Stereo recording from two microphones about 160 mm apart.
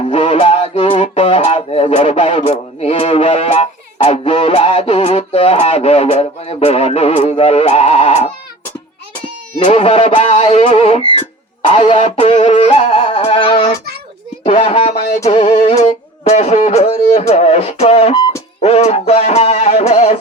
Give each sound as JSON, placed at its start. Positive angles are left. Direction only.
{"t": 0.0, "sound": "music", "side_deg": 35}
{"t": 9.6, "sound": "music", "side_deg": 35}
{"t": 14.4, "sound": "a sound", "side_deg": 40}
{"t": 15.2, "sound": "music", "side_deg": 30}
{"t": 15.5, "sound": "music", "side_deg": 45}